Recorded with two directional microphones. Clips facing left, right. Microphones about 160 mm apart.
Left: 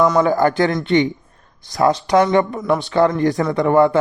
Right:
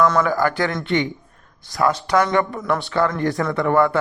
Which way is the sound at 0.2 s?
20° left (ahead or behind).